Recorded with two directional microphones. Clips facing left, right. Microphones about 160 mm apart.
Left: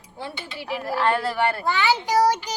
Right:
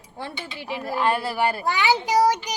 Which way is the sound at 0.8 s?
15° right (ahead or behind).